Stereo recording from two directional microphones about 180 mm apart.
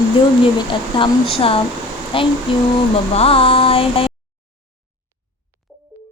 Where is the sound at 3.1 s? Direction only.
30° left (ahead or behind).